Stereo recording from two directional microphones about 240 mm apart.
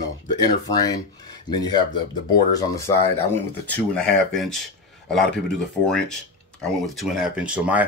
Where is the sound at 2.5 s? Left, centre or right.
Centre.